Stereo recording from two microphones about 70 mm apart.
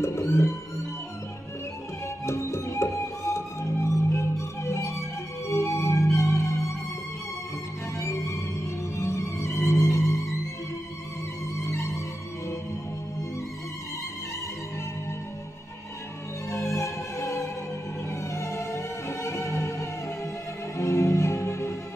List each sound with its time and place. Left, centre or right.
0.0 s music: left
2.2 s music: left
8.0 s music: left
11.6 s music: left
16.4 s music: left